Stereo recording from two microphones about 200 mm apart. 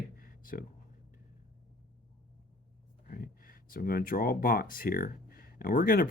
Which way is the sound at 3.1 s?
45° left (ahead or behind).